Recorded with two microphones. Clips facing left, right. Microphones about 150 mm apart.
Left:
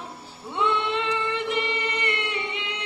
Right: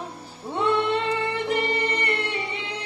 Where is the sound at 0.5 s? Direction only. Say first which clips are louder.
Right 3 dB; 40° right (ahead or behind).